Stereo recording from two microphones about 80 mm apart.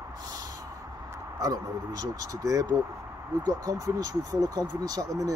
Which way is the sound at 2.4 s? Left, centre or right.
Right.